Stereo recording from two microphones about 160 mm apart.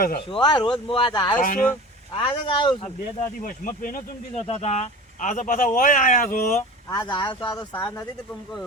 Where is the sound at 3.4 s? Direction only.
60° left (ahead or behind).